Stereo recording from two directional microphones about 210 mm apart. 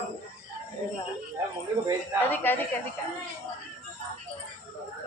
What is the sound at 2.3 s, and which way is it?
Speech, 10° left (ahead or behind).